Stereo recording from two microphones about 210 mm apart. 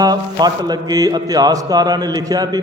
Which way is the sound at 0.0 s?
20° right (ahead or behind).